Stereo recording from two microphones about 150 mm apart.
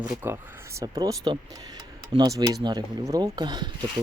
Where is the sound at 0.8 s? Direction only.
25° right (ahead or behind).